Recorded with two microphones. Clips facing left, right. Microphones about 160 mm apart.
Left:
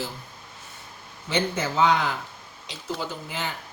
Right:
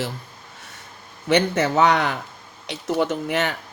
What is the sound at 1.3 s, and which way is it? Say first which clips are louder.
Speech: right 7 dB; 70° right (ahead or behind).